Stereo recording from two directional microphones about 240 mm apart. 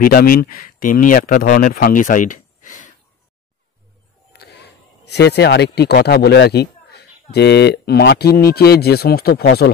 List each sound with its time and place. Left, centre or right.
0.1 s speech: left
4.3 s speech: left